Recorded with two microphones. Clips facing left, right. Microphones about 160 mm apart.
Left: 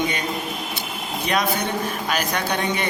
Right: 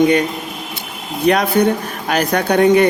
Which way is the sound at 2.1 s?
55° right (ahead or behind).